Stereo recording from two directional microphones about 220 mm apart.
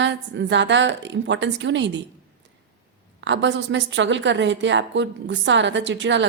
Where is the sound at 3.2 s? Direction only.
55° right (ahead or behind).